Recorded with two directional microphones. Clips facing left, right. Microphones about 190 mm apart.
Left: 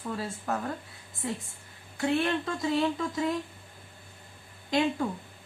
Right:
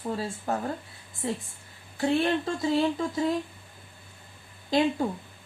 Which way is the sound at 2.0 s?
30° right (ahead or behind).